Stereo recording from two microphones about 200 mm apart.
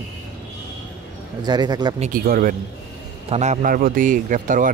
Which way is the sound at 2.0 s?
45° right (ahead or behind).